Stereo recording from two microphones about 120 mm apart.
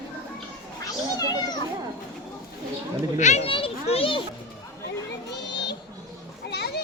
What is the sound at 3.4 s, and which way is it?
Children playing, 50° left (ahead or behind).